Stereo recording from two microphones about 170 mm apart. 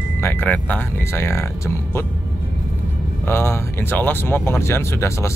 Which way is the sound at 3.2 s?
15° left (ahead or behind).